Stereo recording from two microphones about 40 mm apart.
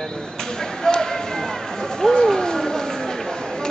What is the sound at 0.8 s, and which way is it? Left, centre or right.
Speech, centre.